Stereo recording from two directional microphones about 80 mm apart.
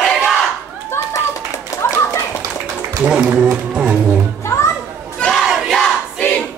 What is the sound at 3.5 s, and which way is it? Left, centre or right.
Music, centre.